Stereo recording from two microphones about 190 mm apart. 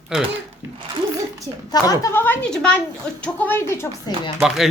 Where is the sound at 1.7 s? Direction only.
20° left (ahead or behind).